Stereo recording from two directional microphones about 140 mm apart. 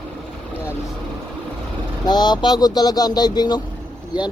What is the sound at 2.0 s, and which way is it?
Speech, 30° left (ahead or behind).